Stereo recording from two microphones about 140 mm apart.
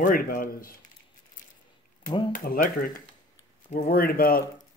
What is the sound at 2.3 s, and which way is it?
Speech, 80° left.